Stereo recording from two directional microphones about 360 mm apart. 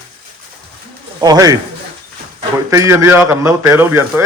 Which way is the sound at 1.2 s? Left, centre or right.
Centre.